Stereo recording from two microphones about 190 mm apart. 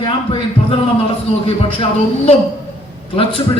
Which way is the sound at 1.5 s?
30° left (ahead or behind).